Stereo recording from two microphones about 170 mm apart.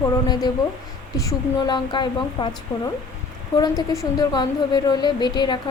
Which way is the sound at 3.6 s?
20° left (ahead or behind).